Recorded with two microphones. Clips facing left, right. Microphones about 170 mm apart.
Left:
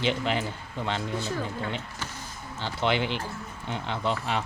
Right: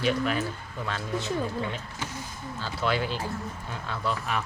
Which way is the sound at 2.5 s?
20° left (ahead or behind).